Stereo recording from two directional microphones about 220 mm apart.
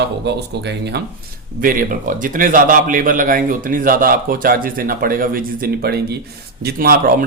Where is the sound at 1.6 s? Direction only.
40° right (ahead or behind).